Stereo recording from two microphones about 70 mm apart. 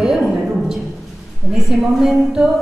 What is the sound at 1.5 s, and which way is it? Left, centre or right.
Speech, centre.